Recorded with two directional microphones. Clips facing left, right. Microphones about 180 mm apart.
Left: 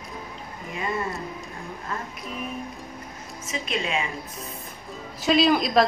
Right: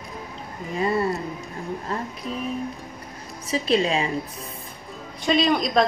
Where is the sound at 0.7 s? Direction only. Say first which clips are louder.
Right 6 dB; 35° right (ahead or behind).